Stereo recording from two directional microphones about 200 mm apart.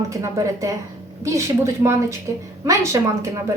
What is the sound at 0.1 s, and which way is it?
A woman's voice, 15° right (ahead or behind).